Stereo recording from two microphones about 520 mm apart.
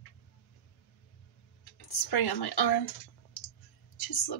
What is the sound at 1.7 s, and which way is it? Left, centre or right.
Speech, left.